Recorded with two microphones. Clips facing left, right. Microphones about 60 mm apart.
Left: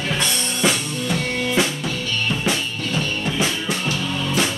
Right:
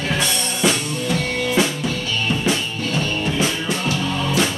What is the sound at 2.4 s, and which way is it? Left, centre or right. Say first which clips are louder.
Music: right 2 dB; centre.